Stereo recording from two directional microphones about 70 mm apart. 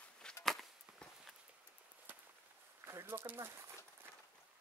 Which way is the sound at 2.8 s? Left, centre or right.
Right.